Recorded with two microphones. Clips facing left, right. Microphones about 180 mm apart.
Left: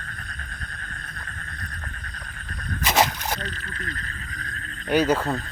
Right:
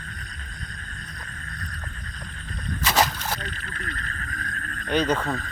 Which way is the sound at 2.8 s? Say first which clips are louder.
Left 1 dB; 20° left (ahead or behind).